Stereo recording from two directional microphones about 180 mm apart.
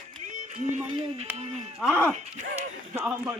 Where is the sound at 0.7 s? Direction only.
35° right (ahead or behind).